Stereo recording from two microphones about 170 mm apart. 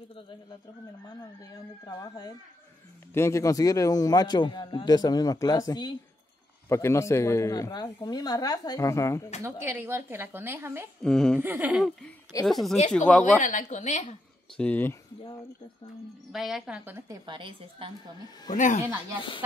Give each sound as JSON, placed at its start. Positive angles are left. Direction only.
{"t": 0.1, "sound": "a man's voice", "side_deg": 30}
{"t": 9.4, "sound": "speech", "side_deg": -10}
{"t": 11.0, "sound": "a woman's voice", "side_deg": 5}
{"t": 11.3, "sound": "a woman's voice", "side_deg": -10}
{"t": 13.2, "sound": "speech", "side_deg": 45}
{"t": 14.6, "sound": "speech", "side_deg": 10}
{"t": 16.3, "sound": "a woman's voice", "side_deg": 0}
{"t": 17.3, "sound": "a woman's voice", "side_deg": -30}
{"t": 18.5, "sound": "speech", "side_deg": 50}